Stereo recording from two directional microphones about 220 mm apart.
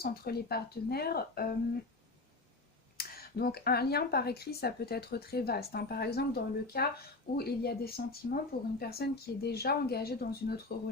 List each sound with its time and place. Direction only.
0.0 s speech: 45° left (ahead or behind)
3.0 s speech: 45° left (ahead or behind)